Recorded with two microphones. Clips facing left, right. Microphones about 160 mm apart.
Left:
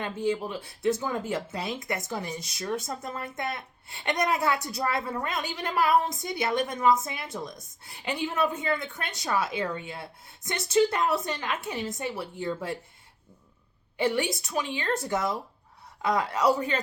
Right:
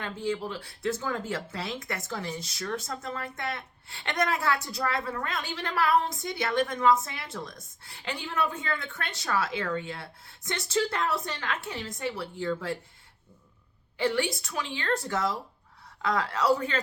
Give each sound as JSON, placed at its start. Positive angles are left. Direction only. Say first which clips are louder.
{"t": 0.0, "sound": "a woman's voice", "louder": "left 3 dB", "side_deg": 20}
{"t": 14.0, "sound": "a woman's voice", "louder": "left 1 dB", "side_deg": 20}